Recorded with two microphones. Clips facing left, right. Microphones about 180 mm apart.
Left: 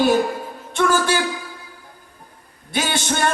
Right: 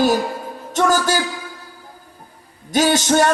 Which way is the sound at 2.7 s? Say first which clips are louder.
Right 7 dB; 40° right (ahead or behind).